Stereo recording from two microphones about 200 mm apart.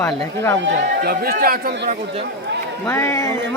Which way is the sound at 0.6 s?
50° right (ahead or behind).